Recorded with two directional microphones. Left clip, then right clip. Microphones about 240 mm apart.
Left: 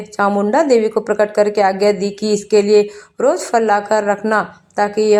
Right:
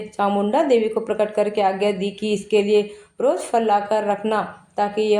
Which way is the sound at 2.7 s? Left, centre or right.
Left.